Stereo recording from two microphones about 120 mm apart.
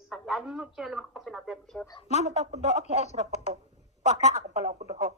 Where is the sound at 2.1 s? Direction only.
70° right (ahead or behind).